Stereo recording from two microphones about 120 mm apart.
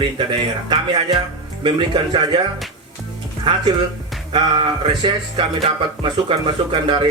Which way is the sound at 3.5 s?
45° right (ahead or behind).